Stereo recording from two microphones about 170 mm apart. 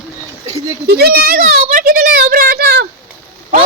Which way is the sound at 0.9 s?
65° right (ahead or behind).